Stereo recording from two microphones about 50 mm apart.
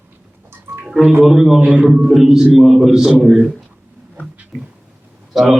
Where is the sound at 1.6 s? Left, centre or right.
Right.